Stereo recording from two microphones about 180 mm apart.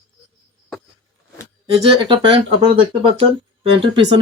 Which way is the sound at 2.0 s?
25° right (ahead or behind).